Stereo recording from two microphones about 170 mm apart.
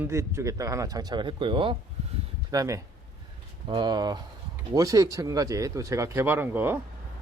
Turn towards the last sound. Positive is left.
turn(degrees=-10)  # may be behind; listen again after turning